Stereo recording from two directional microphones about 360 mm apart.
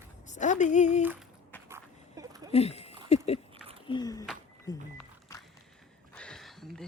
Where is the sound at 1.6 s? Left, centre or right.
Centre.